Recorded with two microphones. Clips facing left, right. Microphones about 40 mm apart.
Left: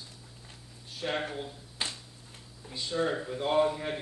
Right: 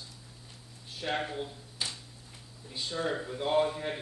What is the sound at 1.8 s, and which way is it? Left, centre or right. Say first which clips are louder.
Finger snapping: left 2 dB; left.